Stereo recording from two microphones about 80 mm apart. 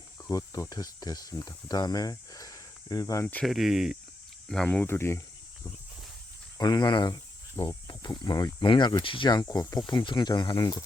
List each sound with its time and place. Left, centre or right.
0.3 s speech: left
3.4 s speech: centre
4.4 s speech: centre
4.9 s speech: left
6.6 s speech: left
8.5 s speech: left
9.5 s speech: left
9.9 s speech: left